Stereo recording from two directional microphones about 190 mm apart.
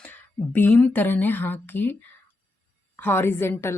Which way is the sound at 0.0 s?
10° left (ahead or behind).